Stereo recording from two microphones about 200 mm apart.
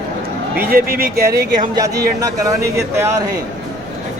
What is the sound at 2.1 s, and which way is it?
Speech, 15° right (ahead or behind).